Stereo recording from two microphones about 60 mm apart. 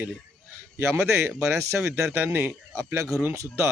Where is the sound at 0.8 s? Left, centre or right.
Right.